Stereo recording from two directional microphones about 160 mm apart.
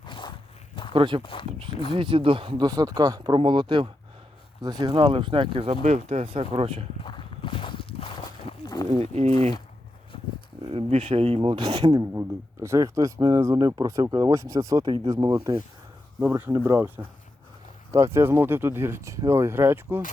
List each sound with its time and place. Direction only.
0.0 s walk: 30° left (ahead or behind)
0.9 s speech: 30° right (ahead or behind)
1.2 s speech: 30° left (ahead or behind)
1.9 s speech: 30° right (ahead or behind)
7.0 s horse: 30° left (ahead or behind)
9.0 s speech: 40° right (ahead or behind)
10.7 s speech: 40° right (ahead or behind)
16.2 s speech: 15° right (ahead or behind)